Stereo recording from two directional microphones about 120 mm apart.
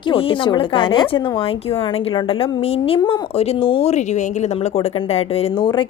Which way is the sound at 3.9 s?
75° left (ahead or behind).